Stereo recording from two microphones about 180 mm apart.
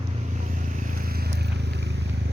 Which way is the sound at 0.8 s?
50° right (ahead or behind).